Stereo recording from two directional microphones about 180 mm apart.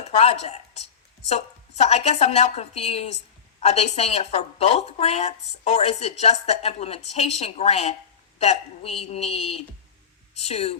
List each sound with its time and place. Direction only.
0.0 s speech: 35° left (ahead or behind)
1.8 s speech: 35° left (ahead or behind)